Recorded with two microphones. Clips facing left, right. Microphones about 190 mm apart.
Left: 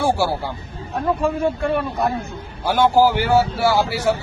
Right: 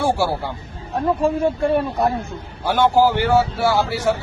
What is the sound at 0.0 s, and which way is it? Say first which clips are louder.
Speech: even; centre (ahead or behind).